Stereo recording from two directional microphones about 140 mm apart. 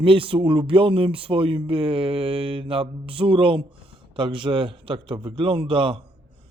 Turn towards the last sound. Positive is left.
turn(degrees=-35)  # may be behind; listen again after turning